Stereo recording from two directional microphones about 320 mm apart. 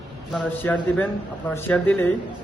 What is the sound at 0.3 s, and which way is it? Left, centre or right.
A man's voice, centre.